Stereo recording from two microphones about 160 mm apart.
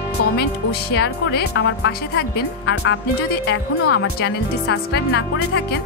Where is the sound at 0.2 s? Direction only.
90° left.